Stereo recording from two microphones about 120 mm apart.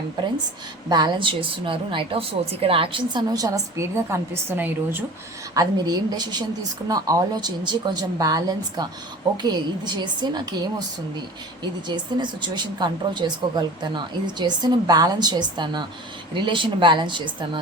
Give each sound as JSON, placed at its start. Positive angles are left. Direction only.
{"t": 0.9, "sound": "a woman's voice", "side_deg": -40}
{"t": 5.5, "sound": "a woman's voice", "side_deg": -35}